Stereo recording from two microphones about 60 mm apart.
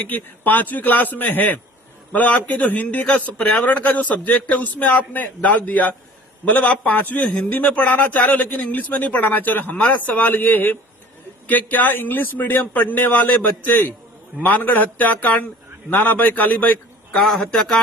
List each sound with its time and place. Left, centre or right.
0.1 s a man's voice: left
17.1 s a man's voice: centre